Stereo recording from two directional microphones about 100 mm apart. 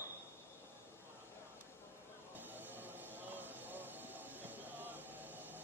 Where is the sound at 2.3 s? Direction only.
20° right (ahead or behind).